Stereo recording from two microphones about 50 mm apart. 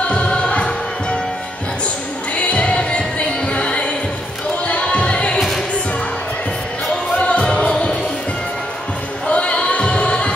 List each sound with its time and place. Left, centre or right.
0.1 s music: left
2.3 s music: left
4.6 s a sound: left
7.2 s music: left
7.4 s music: centre
9.3 s a sound: left
9.7 s music: left